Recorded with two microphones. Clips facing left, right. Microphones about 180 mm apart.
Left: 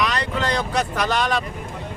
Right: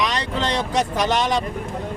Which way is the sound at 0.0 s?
25° right (ahead or behind).